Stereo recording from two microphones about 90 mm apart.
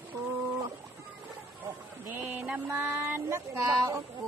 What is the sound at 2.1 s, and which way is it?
Speech, 20° right (ahead or behind).